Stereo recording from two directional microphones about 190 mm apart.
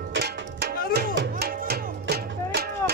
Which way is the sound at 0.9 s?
55° right (ahead or behind).